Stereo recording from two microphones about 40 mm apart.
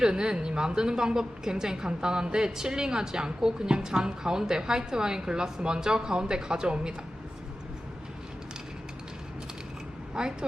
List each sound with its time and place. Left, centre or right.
0.0 s a woman's voice: centre
10.2 s speech: centre